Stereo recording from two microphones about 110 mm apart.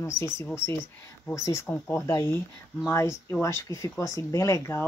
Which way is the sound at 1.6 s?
15° left (ahead or behind).